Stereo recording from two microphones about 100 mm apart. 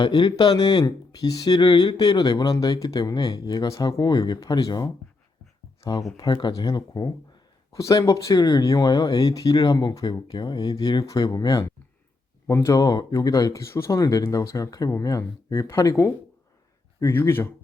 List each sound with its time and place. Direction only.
0.0 s speech: 55° left (ahead or behind)
6.1 s speech: 50° left (ahead or behind); by 17.5 s 25° left (ahead or behind)